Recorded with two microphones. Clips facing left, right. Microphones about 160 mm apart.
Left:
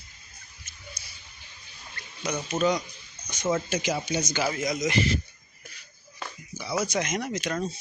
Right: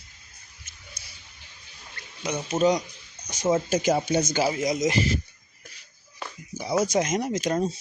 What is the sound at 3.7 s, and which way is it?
Speech, 50° right (ahead or behind).